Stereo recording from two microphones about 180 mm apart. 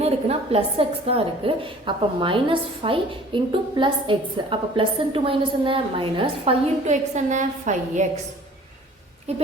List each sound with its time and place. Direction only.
0.0 s a woman's voice: 35° right (ahead or behind)